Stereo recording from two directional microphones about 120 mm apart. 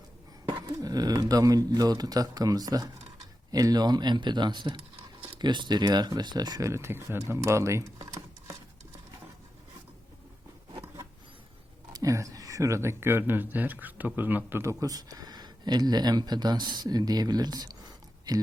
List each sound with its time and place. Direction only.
0.7 s speech: 30° right (ahead or behind)
11.9 s speech: 30° right (ahead or behind)